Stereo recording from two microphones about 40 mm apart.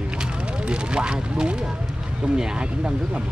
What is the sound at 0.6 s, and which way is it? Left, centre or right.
Speech, right.